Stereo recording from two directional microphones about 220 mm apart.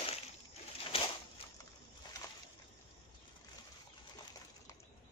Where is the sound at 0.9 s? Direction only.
25° left (ahead or behind).